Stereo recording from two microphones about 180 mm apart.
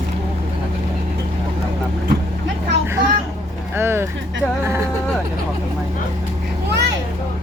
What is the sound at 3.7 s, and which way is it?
Speech, 15° right (ahead or behind).